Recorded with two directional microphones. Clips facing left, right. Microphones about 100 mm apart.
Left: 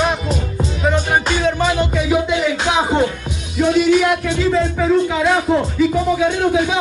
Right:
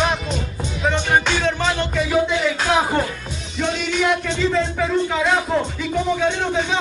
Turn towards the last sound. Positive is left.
turn(degrees=10)  # may be behind; listen again after turning